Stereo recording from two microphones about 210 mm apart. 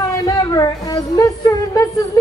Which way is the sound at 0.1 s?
15° left (ahead or behind).